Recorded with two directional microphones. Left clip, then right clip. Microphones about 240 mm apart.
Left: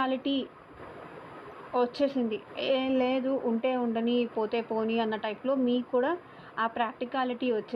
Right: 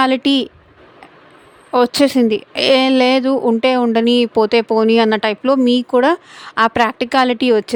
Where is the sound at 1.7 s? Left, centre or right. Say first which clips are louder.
Right 14 dB; right.